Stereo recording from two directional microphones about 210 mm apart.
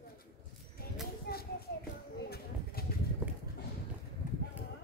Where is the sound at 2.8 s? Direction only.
45° left (ahead or behind).